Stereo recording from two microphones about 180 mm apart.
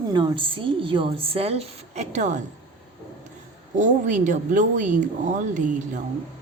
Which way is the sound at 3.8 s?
45° right (ahead or behind).